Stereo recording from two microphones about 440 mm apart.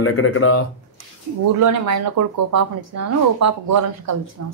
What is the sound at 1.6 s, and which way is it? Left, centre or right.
Speech, right.